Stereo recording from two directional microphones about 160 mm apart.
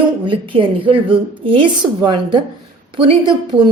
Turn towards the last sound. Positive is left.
turn(degrees=-30)  # may be behind; listen again after turning